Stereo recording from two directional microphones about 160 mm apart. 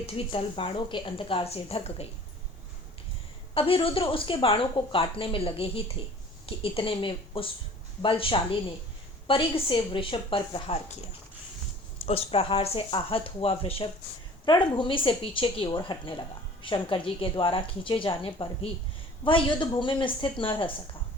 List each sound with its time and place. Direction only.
0.0 s speech: 35° left (ahead or behind)
3.5 s a woman's voice: 35° left (ahead or behind)
12.0 s speech: 35° left (ahead or behind)